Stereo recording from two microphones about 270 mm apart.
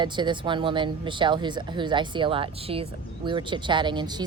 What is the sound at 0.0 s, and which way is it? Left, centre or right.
Speech, centre.